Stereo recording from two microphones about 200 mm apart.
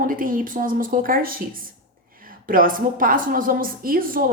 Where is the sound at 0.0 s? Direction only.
45° right (ahead or behind).